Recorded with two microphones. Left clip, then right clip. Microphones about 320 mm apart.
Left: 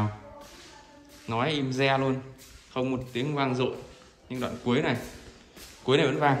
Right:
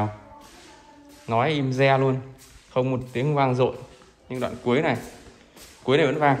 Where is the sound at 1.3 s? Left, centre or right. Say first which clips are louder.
Right 5 dB; centre.